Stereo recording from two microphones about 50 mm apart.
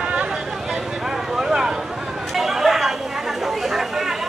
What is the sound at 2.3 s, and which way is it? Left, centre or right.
Chatter, centre.